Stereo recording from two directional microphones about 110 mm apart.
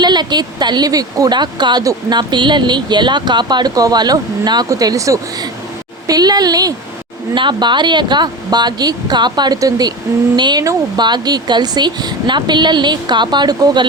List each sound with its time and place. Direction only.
0.0 s speech: 40° right (ahead or behind)
7.3 s a woman's voice: 45° right (ahead or behind)
10.6 s speech: 30° right (ahead or behind)
11.0 s a woman's voice: 40° right (ahead or behind)